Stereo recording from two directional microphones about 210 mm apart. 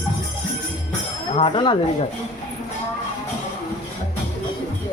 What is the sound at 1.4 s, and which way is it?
Speech, 25° left (ahead or behind).